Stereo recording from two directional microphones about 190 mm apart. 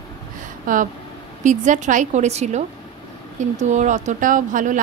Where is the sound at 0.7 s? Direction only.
45° right (ahead or behind).